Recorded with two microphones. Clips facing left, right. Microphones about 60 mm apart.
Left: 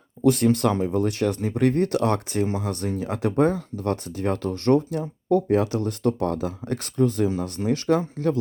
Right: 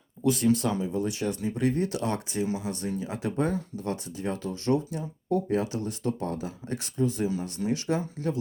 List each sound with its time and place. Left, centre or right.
0.2 s speech: left